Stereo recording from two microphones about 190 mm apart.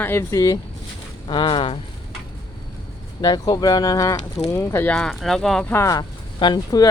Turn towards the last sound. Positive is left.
turn(degrees=20)  # may be behind; listen again after turning